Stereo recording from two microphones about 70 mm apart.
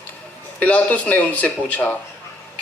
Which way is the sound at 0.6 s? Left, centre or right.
Centre.